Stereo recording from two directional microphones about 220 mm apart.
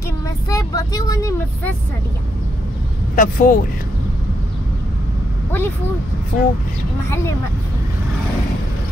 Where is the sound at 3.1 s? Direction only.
35° left (ahead or behind).